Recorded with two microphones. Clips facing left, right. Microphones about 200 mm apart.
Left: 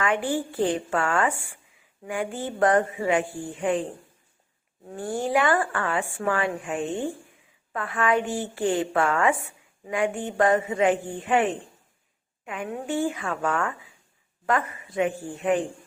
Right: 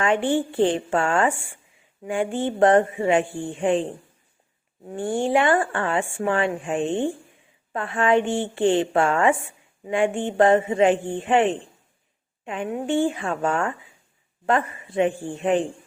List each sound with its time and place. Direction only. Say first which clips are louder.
0.0 s a woman's voice: right 4 dB; 25° right (ahead or behind)
4.9 s a woman's voice: right 4 dB; 25° right (ahead or behind)